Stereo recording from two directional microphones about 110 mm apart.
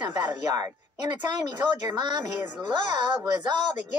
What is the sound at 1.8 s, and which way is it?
Speech, 40° right (ahead or behind).